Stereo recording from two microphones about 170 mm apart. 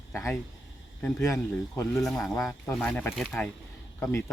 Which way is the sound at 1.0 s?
20° left (ahead or behind).